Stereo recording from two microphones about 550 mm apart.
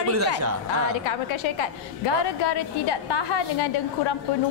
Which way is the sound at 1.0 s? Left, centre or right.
Left.